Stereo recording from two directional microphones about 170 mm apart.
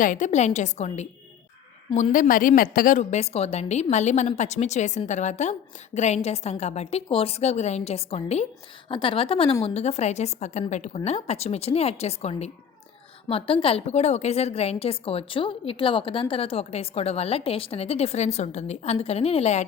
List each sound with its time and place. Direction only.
0.0 s a woman's voice: 50° left (ahead or behind)
2.1 s a woman's voice: 55° left (ahead or behind)